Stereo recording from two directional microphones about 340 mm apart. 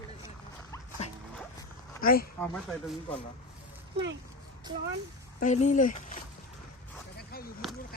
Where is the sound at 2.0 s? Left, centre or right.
Left.